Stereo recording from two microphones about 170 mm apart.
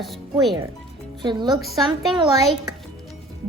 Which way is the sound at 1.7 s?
Centre (ahead or behind).